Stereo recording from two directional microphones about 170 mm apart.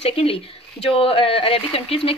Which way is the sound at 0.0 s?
35° left (ahead or behind).